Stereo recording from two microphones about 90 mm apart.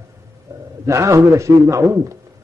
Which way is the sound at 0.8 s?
35° right (ahead or behind).